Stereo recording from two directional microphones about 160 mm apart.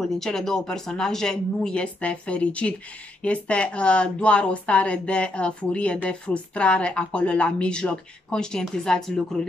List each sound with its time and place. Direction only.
0.0 s a woman's voice: centre (ahead or behind)